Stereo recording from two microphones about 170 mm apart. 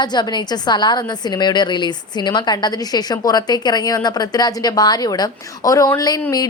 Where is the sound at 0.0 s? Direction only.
25° left (ahead or behind).